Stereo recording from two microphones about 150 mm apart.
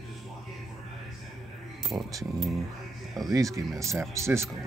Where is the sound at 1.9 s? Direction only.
10° right (ahead or behind).